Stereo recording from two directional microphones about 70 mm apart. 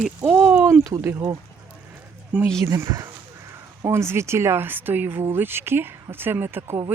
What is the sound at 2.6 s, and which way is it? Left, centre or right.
A man's voice, right.